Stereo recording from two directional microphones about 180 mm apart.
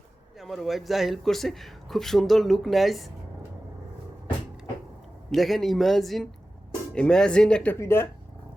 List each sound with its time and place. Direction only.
0.3 s a man's voice: centre (ahead or behind)
5.3 s a man's voice: centre (ahead or behind)